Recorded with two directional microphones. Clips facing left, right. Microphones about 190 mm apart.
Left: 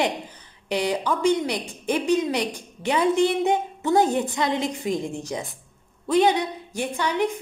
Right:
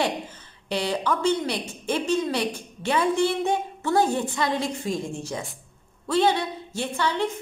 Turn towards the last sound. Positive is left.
turn(degrees=15)  # may be behind; listen again after turning